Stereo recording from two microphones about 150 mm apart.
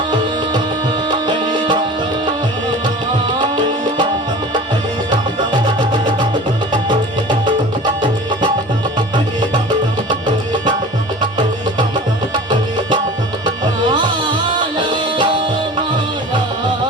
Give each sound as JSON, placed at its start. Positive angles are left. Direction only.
{"t": 1.0, "sound": "music", "side_deg": -30}
{"t": 3.5, "sound": "tabla", "side_deg": -30}
{"t": 5.5, "sound": "music", "side_deg": -30}
{"t": 12.5, "sound": "music", "side_deg": -30}
{"t": 14.8, "sound": "music", "side_deg": -30}